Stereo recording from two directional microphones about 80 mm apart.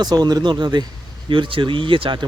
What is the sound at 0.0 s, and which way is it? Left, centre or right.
Speech, right.